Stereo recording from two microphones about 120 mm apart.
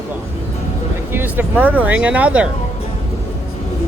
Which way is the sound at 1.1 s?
15° right (ahead or behind).